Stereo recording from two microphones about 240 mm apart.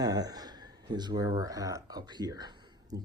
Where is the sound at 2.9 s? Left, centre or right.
Right.